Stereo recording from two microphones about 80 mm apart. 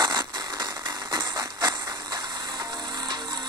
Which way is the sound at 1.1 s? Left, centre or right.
Right.